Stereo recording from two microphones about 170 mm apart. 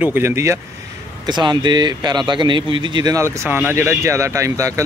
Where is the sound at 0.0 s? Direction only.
15° right (ahead or behind).